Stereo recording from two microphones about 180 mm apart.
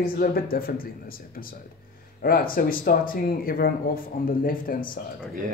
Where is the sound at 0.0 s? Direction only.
55° left (ahead or behind).